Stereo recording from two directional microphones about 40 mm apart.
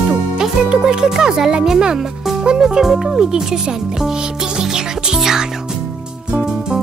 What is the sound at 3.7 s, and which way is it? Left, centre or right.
Speech, centre.